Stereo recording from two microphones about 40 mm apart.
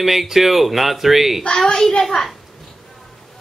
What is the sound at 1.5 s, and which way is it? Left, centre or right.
Speech, centre.